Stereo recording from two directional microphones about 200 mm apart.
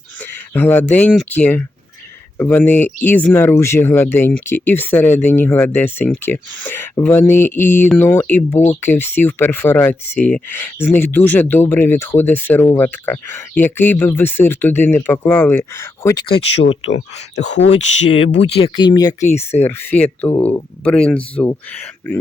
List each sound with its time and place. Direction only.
0.2 s speech: 10° left (ahead or behind)
16.8 s speech: 35° left (ahead or behind); by 22.2 s 10° left (ahead or behind)